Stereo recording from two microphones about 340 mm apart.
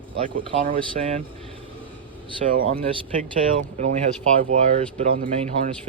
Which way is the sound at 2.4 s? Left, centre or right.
Right.